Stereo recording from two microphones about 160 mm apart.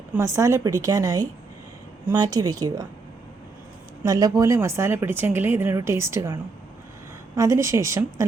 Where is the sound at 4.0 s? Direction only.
25° right (ahead or behind).